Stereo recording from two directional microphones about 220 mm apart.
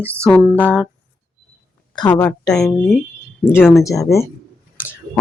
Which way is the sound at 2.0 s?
20° left (ahead or behind).